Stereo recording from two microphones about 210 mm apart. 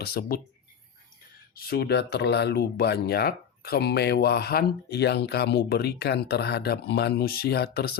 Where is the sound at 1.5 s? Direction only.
45° left (ahead or behind).